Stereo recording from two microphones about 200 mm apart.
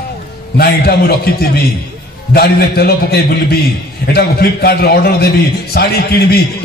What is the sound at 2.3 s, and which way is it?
A man's voice, 50° left (ahead or behind).